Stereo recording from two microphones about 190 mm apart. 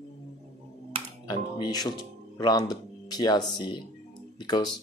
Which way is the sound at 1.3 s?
20° left (ahead or behind).